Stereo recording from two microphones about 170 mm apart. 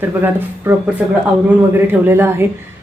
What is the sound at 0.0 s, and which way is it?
A woman's voice, 10° right (ahead or behind).